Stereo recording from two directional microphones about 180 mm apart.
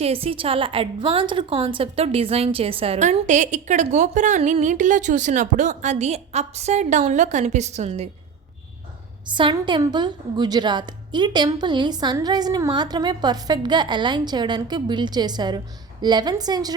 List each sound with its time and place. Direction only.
0.0 s a woman's voice: 30° right (ahead or behind)
9.2 s a woman's voice: 25° right (ahead or behind)